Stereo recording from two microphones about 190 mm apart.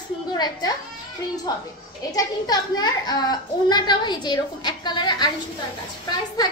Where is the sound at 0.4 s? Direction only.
20° left (ahead or behind).